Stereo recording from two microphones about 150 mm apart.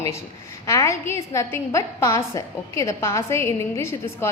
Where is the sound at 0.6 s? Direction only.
20° left (ahead or behind).